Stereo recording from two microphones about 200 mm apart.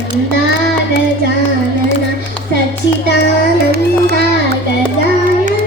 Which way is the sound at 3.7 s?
55° right (ahead or behind).